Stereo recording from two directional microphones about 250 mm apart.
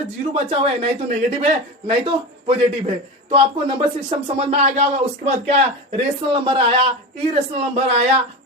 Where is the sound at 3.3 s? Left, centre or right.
Right.